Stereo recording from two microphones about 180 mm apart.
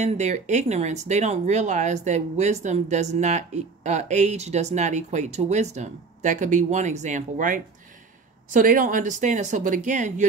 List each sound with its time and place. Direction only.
0.0 s speech: 40° right (ahead or behind)